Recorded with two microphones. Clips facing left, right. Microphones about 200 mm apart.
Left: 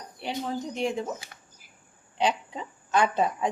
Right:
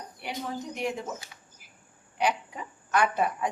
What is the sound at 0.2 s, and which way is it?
Speech, 30° left (ahead or behind).